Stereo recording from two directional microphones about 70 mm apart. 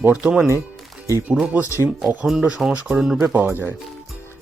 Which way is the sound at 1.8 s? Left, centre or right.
Right.